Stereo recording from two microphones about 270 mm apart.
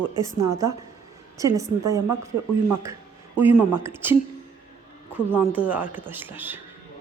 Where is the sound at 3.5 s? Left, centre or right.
Centre.